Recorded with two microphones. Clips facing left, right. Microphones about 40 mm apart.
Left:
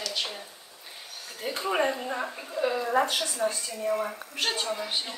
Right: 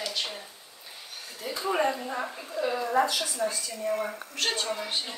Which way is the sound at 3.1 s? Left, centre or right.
Left.